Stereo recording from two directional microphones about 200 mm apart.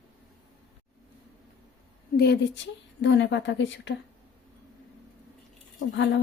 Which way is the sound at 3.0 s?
65° left (ahead or behind).